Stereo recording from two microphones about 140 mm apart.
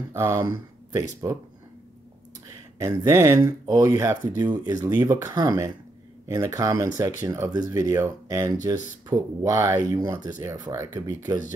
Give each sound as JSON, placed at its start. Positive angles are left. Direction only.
{"t": 0.1, "sound": "speech", "side_deg": -20}
{"t": 2.8, "sound": "speech", "side_deg": -20}